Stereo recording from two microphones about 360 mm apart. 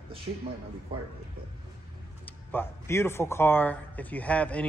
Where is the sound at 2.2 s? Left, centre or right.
Centre.